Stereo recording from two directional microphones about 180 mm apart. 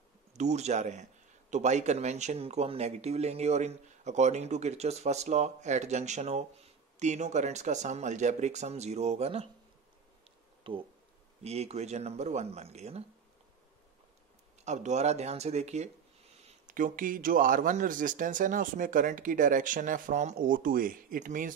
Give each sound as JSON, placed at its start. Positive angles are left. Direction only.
{"t": 0.3, "sound": "speech", "side_deg": -40}
{"t": 10.6, "sound": "speech", "side_deg": -30}
{"t": 14.6, "sound": "speech", "side_deg": -40}
{"t": 16.6, "sound": "speech", "side_deg": -50}